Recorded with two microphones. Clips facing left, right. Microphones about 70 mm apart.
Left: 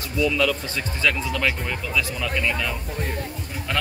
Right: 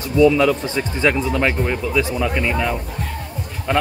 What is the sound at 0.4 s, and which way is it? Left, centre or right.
Speech, right.